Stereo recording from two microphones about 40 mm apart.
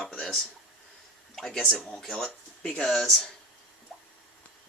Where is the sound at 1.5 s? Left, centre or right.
Left.